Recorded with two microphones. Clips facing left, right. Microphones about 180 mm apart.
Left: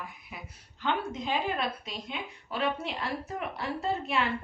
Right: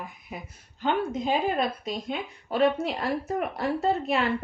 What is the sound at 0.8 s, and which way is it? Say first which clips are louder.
A woman's voice: right 5 dB; 45° right (ahead or behind).